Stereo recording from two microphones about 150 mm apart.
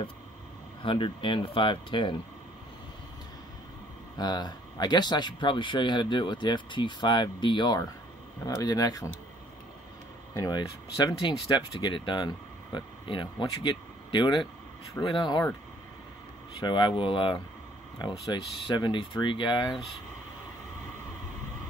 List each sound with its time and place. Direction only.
0.8 s speech: 35° left (ahead or behind)
4.2 s speech: 30° left (ahead or behind)
10.3 s speech: 25° left (ahead or behind)
16.5 s speech: 30° left (ahead or behind)